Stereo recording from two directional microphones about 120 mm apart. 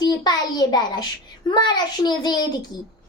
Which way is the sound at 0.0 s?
35° left (ahead or behind).